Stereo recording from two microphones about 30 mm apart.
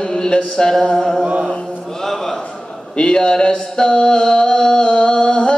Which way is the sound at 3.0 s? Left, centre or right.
Left.